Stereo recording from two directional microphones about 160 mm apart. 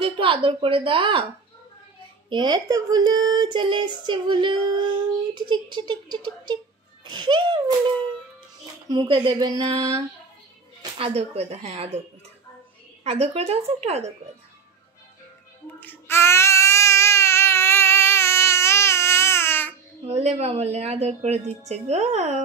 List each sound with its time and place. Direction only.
0.0 s speech: 30° right (ahead or behind)
2.2 s speech: 30° right (ahead or behind)
8.8 s speech: 25° right (ahead or behind)
10.8 s speech: 35° right (ahead or behind)
13.0 s speech: 40° right (ahead or behind)
15.8 s babbling: 15° left (ahead or behind)
20.1 s a woman's voice: 45° right (ahead or behind)